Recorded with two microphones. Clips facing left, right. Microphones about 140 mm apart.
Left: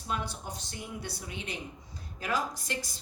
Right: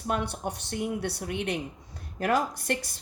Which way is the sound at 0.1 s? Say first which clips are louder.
Right 6 dB; 60° right (ahead or behind).